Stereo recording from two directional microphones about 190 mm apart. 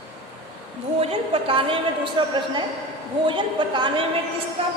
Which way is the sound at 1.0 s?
30° right (ahead or behind).